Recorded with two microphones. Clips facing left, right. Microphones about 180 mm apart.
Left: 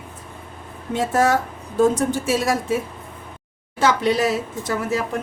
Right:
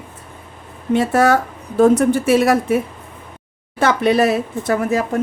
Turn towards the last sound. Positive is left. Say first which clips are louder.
# right 5 dB
turn(degrees=-55)  # may be behind; listen again after turning